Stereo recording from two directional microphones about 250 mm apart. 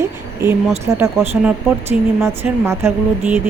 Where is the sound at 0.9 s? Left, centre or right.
Centre.